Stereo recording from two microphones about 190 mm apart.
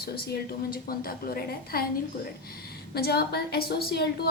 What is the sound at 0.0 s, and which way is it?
A woman's voice, 55° left (ahead or behind).